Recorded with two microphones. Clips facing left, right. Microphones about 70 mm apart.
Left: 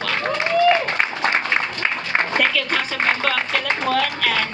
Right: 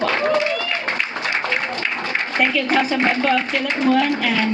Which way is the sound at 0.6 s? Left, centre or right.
Left.